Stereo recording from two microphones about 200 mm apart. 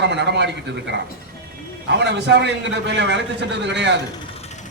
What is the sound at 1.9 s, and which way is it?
A man's voice, 60° right (ahead or behind).